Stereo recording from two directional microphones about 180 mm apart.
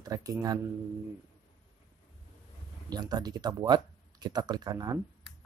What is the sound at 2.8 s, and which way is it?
Speech, 20° right (ahead or behind).